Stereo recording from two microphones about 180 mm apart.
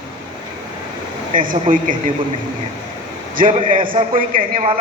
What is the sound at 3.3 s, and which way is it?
Speech, 45° right (ahead or behind).